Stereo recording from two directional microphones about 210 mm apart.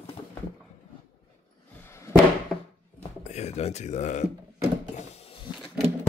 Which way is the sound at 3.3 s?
30° left (ahead or behind).